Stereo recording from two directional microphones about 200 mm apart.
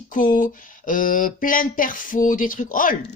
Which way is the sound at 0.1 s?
45° left (ahead or behind).